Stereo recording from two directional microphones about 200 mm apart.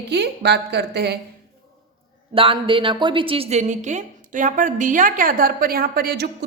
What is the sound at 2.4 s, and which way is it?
A man's voice, 25° right (ahead or behind).